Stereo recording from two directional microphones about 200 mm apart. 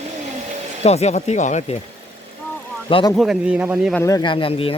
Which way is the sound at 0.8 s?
35° left (ahead or behind).